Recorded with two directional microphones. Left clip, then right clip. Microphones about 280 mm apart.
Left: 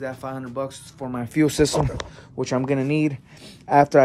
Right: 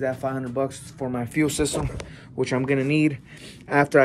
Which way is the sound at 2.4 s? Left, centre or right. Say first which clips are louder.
Even; centre.